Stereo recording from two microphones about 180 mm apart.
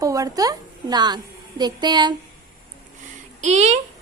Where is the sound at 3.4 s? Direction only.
40° right (ahead or behind).